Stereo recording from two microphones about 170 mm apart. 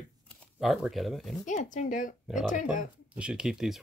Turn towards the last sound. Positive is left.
turn(degrees=-5)  # may be behind; listen again after turning